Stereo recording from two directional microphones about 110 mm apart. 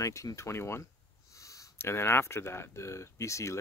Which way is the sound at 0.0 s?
30° left (ahead or behind).